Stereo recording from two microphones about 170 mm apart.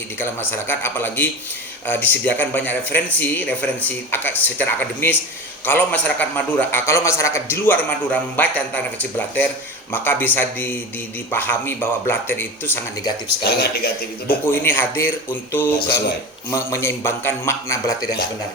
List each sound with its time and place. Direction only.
0.2 s a man's voice: 15° left (ahead or behind)
13.4 s speech: 70° left (ahead or behind)
14.3 s a man's voice: 10° left (ahead or behind)